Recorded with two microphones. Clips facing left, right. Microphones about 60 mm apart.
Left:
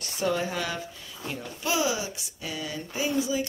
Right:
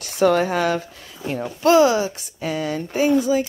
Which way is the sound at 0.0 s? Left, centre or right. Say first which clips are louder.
Right 10 dB; right.